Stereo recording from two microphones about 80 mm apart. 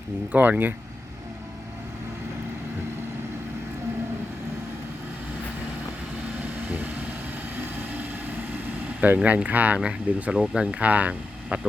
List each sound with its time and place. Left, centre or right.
0.3 s speech: right
6.4 s vehicle: right
7.6 s speech: right